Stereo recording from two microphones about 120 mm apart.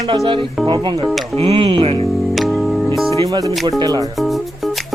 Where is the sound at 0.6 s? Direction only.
40° right (ahead or behind).